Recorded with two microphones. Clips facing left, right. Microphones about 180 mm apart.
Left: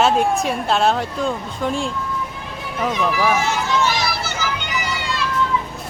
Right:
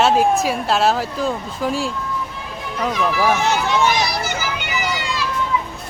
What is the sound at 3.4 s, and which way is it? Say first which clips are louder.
Run: right 3 dB; 65° right (ahead or behind).